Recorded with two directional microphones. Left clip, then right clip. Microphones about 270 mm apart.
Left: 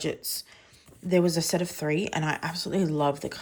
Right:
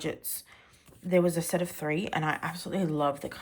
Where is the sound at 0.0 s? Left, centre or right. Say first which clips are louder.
Left 4 dB; centre.